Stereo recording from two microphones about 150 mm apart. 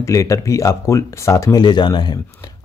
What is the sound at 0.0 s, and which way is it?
A man's voice, 20° left (ahead or behind).